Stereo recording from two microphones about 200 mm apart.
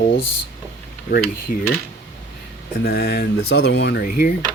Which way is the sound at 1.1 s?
45° left (ahead or behind).